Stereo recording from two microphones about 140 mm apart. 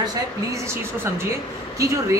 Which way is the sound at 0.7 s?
20° right (ahead or behind).